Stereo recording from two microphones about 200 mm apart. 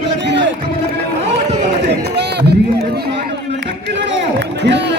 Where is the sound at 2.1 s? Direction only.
55° right (ahead or behind).